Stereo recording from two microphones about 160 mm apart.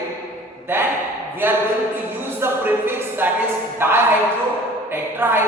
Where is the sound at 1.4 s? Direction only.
15° right (ahead or behind).